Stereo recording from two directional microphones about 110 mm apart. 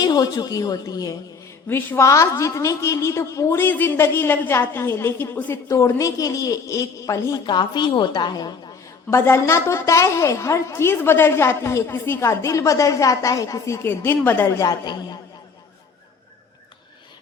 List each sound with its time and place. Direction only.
0.0 s a woman's voice: 35° left (ahead or behind)
1.6 s a woman's voice: 20° left (ahead or behind); by 8.5 s 40° left (ahead or behind)
9.0 s a woman's voice: 25° left (ahead or behind)